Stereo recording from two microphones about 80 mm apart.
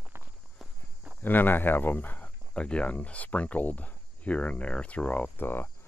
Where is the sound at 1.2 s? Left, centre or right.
Left.